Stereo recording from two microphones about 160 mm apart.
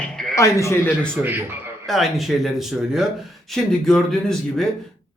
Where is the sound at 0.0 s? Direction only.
5° left (ahead or behind).